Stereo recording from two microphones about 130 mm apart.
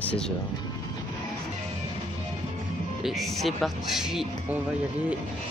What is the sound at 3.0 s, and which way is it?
Speech, centre (ahead or behind).